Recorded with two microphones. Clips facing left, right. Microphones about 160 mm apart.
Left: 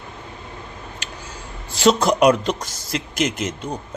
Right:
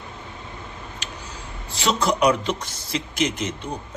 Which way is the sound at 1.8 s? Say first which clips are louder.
Left 5 dB; 40° left (ahead or behind).